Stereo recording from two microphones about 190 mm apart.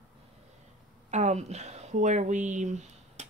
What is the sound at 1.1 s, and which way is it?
Speech, 35° right (ahead or behind).